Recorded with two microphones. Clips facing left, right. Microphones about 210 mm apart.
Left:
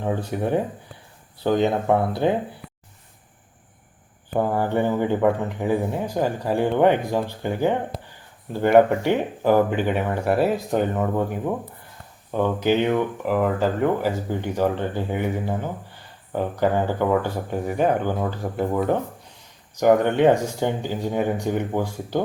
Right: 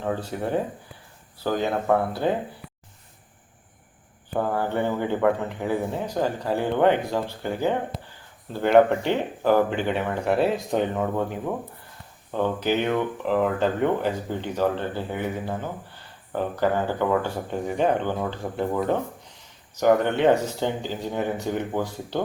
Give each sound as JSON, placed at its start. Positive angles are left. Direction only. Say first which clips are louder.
{"t": 0.3, "sound": "speech", "louder": "left 3 dB", "side_deg": 15}
{"t": 4.4, "sound": "speech", "louder": "left 3 dB", "side_deg": 15}